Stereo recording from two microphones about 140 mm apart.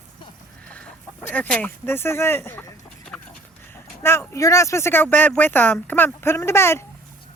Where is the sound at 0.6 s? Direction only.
10° left (ahead or behind).